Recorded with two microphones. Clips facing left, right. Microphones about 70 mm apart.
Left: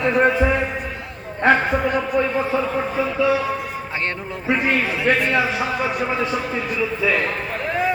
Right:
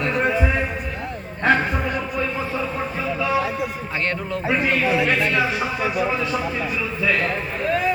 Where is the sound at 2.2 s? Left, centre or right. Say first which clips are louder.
Left 4 dB; left.